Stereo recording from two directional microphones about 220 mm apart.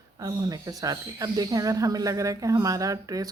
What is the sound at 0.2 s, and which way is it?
Speech, 15° right (ahead or behind).